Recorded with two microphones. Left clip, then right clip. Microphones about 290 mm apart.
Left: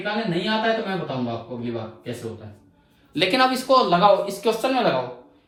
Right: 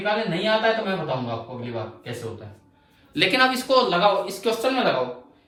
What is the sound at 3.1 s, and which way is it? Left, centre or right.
Speech, centre.